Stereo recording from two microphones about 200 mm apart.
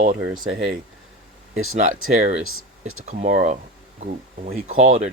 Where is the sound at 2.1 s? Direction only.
35° right (ahead or behind).